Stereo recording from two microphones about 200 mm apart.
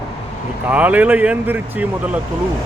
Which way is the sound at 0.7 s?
5° right (ahead or behind).